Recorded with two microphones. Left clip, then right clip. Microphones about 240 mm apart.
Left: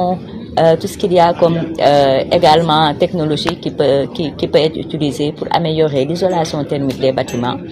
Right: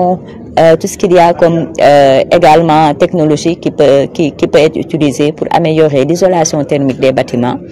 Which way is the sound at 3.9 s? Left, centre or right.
Right.